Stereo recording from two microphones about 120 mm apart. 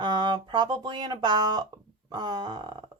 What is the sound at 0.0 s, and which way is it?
Speech, 40° right (ahead or behind).